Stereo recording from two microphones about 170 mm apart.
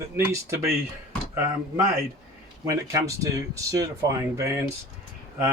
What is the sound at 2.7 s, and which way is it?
Speech, 20° right (ahead or behind).